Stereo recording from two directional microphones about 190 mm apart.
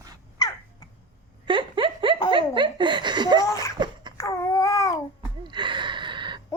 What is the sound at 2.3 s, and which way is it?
Giggle, 25° right (ahead or behind).